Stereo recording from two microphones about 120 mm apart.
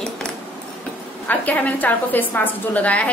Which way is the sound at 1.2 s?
15° left (ahead or behind).